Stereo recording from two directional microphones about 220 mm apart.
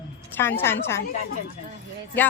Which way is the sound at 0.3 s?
10° left (ahead or behind).